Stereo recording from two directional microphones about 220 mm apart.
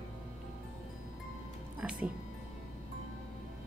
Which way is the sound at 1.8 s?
5° right (ahead or behind).